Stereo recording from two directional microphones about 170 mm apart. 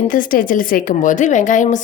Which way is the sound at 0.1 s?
55° left (ahead or behind).